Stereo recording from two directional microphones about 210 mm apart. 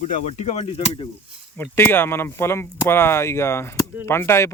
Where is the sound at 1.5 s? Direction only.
10° left (ahead or behind).